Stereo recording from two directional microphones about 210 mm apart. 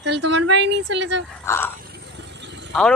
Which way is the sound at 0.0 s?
55° right (ahead or behind).